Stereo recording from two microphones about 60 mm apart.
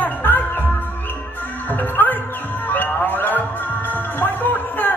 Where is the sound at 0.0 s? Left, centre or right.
Left.